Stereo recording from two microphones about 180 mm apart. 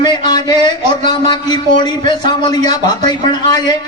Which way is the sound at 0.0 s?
25° left (ahead or behind).